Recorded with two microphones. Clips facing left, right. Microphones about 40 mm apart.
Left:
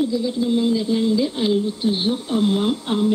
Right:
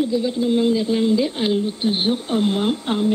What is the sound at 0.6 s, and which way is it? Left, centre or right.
Speech, right.